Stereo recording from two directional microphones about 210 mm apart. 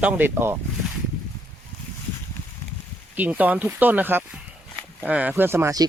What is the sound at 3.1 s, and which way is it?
Speech, 10° right (ahead or behind).